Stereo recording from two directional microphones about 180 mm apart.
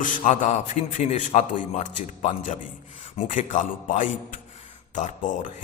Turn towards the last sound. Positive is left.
turn(degrees=45)  # may be behind; listen again after turning